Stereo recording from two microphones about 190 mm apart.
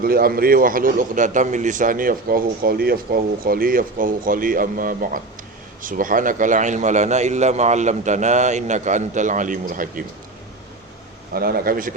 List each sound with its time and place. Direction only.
0.0 s a man's voice: 50° right (ahead or behind)
11.3 s a man's voice: 50° right (ahead or behind)